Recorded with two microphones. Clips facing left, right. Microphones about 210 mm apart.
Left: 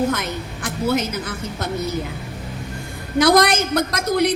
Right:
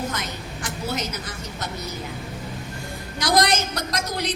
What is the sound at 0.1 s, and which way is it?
A woman's voice, 55° left (ahead or behind).